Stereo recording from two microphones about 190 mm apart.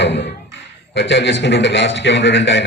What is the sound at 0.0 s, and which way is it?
A man's voice, 65° left (ahead or behind).